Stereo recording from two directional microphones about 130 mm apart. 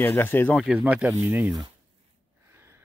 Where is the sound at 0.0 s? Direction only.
15° left (ahead or behind).